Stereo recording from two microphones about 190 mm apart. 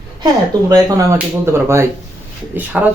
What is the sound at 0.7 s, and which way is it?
Speech, 15° right (ahead or behind).